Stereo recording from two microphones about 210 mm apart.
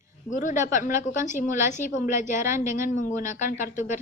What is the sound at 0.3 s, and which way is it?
A woman's voice, 35° left (ahead or behind).